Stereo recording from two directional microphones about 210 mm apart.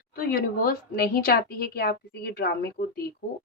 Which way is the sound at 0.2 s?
45° left (ahead or behind).